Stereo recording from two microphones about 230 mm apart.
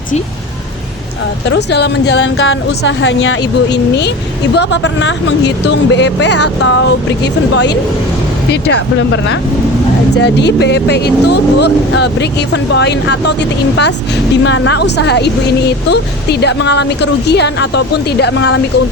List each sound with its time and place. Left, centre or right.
1.5 s speech: left
8.6 s speech: left
14.4 s speech: left